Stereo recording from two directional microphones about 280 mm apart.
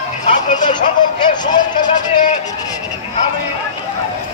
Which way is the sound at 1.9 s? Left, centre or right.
Centre.